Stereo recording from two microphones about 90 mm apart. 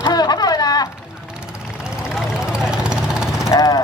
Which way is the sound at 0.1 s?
45° left (ahead or behind).